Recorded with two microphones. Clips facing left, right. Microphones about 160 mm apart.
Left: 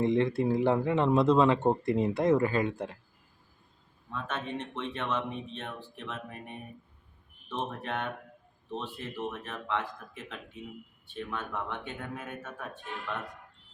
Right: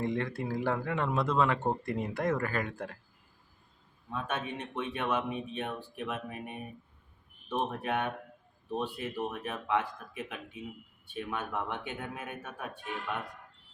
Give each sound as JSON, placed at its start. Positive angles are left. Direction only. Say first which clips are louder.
{"t": 0.0, "sound": "speech", "louder": "left 7 dB", "side_deg": 25}
{"t": 4.1, "sound": "speech", "louder": "even", "side_deg": -10}
{"t": 7.8, "sound": "speech", "louder": "right 2 dB", "side_deg": -15}